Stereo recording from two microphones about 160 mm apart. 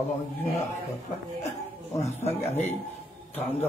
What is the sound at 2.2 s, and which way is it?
Speech, 45° left (ahead or behind).